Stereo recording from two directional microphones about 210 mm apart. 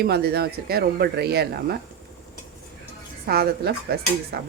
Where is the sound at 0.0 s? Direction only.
50° right (ahead or behind).